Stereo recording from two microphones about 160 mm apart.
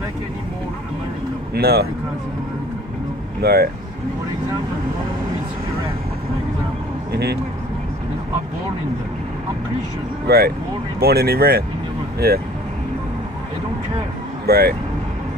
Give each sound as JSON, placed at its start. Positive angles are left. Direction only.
{"t": 1.5, "sound": "speech", "side_deg": -80}
{"t": 3.4, "sound": "speech", "side_deg": -80}
{"t": 7.1, "sound": "a sound", "side_deg": -90}
{"t": 10.2, "sound": "speech", "side_deg": -75}
{"t": 14.4, "sound": "speech", "side_deg": -75}